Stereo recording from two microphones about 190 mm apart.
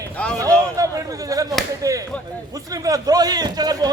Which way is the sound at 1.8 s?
15° right (ahead or behind).